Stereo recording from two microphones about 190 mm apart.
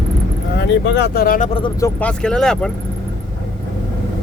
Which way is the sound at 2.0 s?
5° left (ahead or behind).